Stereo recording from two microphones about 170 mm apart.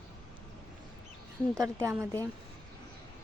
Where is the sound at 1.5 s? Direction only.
15° right (ahead or behind).